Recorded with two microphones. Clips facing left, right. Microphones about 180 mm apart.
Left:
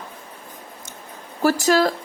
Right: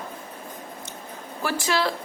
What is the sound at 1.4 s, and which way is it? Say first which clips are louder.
Speech: left 8 dB; 40° left (ahead or behind).